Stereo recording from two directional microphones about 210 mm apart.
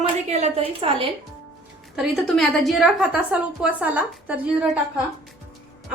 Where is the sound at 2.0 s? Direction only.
Centre (ahead or behind).